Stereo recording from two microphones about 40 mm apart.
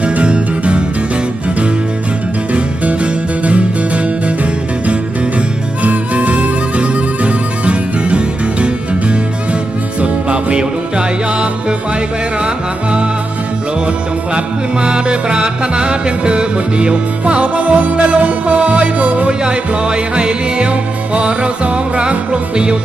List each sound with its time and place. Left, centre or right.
0.0 s music: right
2.5 s music: right
5.8 s music: right
14.3 s music: right
19.3 s music: right